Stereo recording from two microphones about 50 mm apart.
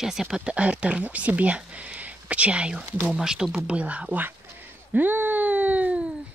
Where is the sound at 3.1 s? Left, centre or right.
Centre.